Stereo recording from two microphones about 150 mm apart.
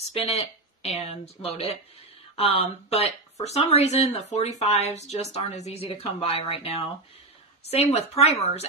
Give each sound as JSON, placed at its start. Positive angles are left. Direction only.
{"t": 0.1, "sound": "speech", "side_deg": 45}